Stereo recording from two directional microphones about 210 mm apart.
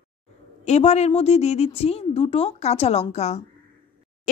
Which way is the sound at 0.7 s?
30° left (ahead or behind).